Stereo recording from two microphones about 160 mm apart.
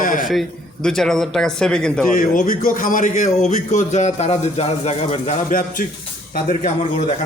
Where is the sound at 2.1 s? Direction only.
60° left (ahead or behind).